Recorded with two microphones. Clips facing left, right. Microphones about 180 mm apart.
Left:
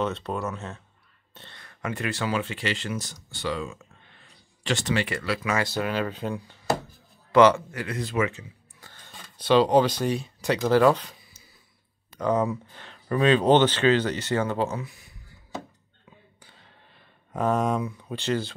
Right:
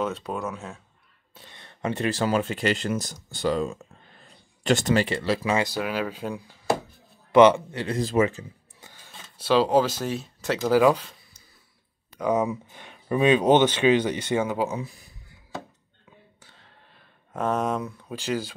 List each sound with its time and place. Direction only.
0.0 s speech: 10° right (ahead or behind)
1.3 s a sound: 10° right (ahead or behind)
1.6 s speech: 25° right (ahead or behind); by 5.0 s 45° right (ahead or behind)
5.0 s speech: 30° right (ahead or behind)
5.8 s speech: 5° right (ahead or behind)
7.3 s a man's voice: 20° right (ahead or behind); by 8.5 s 35° right (ahead or behind)
8.9 s speech: 5° right (ahead or behind)
12.2 s speech: 10° right (ahead or behind)
16.3 s a sound: centre (ahead or behind)